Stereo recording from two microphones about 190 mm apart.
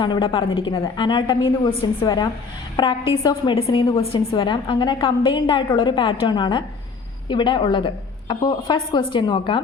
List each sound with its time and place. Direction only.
0.0 s a woman's voice: 25° left (ahead or behind)